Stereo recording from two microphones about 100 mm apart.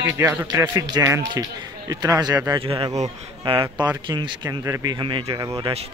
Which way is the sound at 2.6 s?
70° right (ahead or behind).